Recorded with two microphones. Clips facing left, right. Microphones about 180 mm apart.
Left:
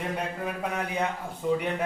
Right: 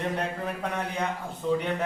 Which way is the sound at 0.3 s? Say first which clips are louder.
Even; 5° left (ahead or behind).